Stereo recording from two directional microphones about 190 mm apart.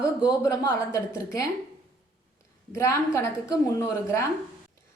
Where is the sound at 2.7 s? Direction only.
15° left (ahead or behind).